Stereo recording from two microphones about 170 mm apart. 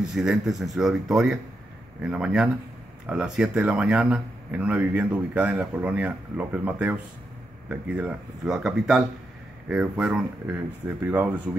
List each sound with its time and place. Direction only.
0.1 s speech: centre (ahead or behind)